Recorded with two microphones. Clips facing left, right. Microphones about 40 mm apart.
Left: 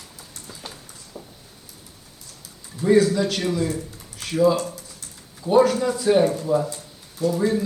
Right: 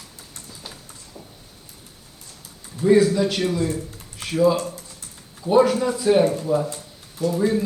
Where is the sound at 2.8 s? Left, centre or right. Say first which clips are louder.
Right 1 dB; centre.